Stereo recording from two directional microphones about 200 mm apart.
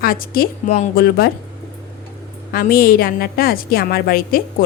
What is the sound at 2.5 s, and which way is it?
Speech, 50° left (ahead or behind).